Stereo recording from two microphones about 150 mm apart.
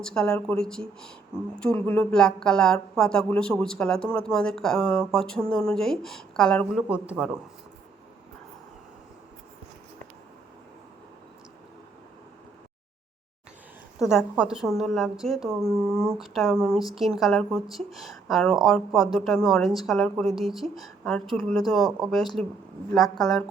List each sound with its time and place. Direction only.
0.0 s speech: 5° left (ahead or behind)
6.8 s a man's voice: 10° right (ahead or behind)
14.0 s speech: 5° right (ahead or behind)